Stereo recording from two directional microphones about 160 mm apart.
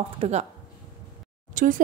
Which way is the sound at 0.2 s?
40° right (ahead or behind).